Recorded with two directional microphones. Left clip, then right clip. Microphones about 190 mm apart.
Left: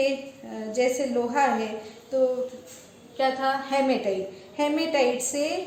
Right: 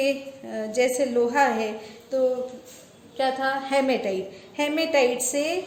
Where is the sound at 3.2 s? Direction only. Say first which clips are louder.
Even; 40° right (ahead or behind).